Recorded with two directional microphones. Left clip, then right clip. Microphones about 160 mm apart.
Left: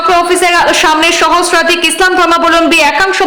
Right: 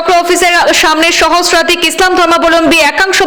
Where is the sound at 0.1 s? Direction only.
25° right (ahead or behind).